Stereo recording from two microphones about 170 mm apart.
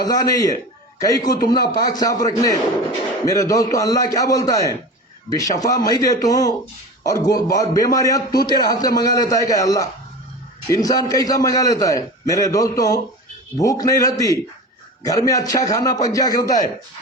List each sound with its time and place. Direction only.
0.0 s a man's voice: 20° left (ahead or behind)
1.3 s speech: 55° left (ahead or behind)
1.9 s a man's voice: 20° left (ahead or behind)